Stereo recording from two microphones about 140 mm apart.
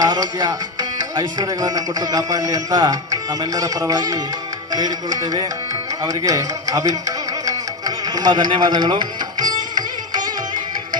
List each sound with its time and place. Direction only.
0.0 s tabla: 30° right (ahead or behind)
6.0 s music: 25° right (ahead or behind)